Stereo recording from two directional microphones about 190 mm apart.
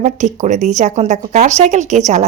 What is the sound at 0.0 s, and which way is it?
Speech, 40° right (ahead or behind).